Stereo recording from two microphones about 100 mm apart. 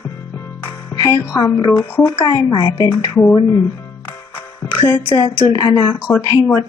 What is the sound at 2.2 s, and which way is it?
Speech, 45° left (ahead or behind).